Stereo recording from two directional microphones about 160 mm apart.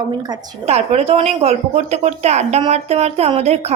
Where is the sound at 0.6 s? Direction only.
40° right (ahead or behind).